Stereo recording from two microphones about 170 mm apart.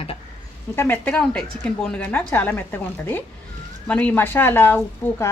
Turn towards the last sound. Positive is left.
turn(degrees=10)  # may be behind; listen again after turning